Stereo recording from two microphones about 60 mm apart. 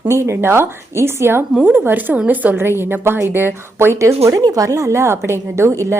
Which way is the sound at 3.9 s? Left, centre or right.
Right.